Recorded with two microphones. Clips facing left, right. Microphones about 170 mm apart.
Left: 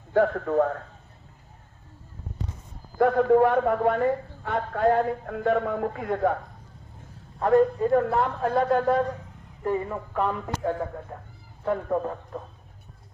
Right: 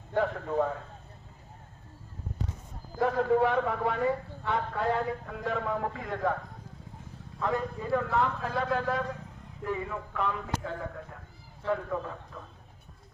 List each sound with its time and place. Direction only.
0.1 s a man's voice: 60° left (ahead or behind)
3.0 s a man's voice: 55° left (ahead or behind)